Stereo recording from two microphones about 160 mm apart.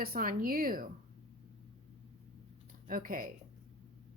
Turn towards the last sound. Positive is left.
turn(degrees=-60)  # may be behind; listen again after turning